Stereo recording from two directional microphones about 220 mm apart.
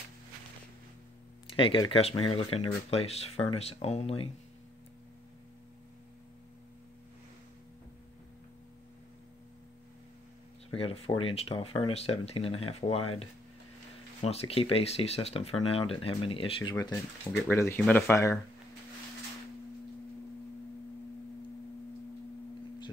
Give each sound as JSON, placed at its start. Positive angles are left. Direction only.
{"t": 1.6, "sound": "speech", "side_deg": 25}
{"t": 10.7, "sound": "speech", "side_deg": 25}
{"t": 14.2, "sound": "speech", "side_deg": 25}
{"t": 17.5, "sound": "speech", "side_deg": 10}